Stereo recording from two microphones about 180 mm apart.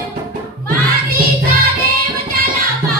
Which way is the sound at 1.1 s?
55° right (ahead or behind).